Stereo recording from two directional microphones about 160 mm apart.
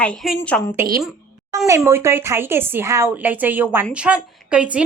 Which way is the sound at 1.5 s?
20° right (ahead or behind).